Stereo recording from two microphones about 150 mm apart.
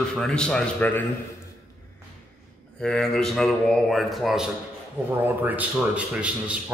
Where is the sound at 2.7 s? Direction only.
5° left (ahead or behind).